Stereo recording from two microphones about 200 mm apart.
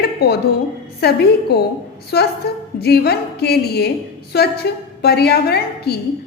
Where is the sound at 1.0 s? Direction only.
55° left (ahead or behind).